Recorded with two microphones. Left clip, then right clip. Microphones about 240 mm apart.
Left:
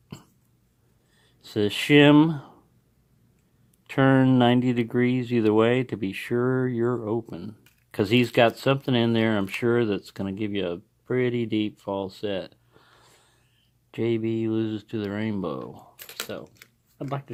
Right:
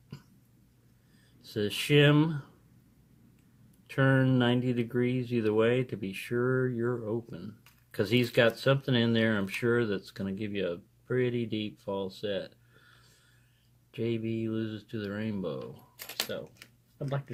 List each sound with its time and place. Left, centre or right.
1.4 s speech: left
3.8 s speech: left
17.1 s speech: left